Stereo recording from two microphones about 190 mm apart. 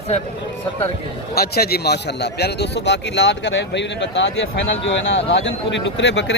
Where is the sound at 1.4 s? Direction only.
55° left (ahead or behind).